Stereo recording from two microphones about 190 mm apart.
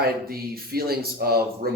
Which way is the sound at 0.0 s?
55° right (ahead or behind).